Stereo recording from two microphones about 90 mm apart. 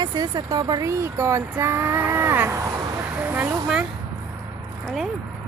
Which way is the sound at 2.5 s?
35° right (ahead or behind).